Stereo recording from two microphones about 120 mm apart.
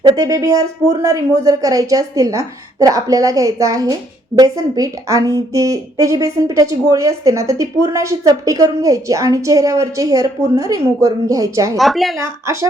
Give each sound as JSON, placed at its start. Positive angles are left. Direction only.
{"t": 0.2, "sound": "a woman's voice", "side_deg": -30}
{"t": 11.8, "sound": "a woman's voice", "side_deg": 0}
{"t": 12.2, "sound": "a woman's voice", "side_deg": -25}